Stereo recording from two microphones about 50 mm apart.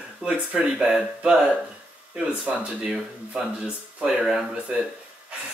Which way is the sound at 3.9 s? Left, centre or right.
Centre.